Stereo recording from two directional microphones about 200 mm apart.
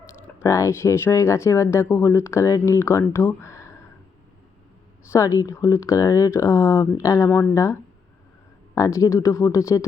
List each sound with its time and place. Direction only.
0.3 s speech: 15° left (ahead or behind)
5.1 s speech: 15° left (ahead or behind)